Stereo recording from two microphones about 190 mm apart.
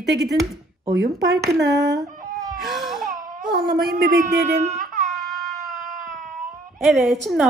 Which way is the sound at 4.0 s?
55° right (ahead or behind).